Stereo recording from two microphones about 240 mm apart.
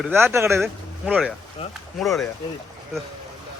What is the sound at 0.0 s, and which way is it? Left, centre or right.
Speech, centre.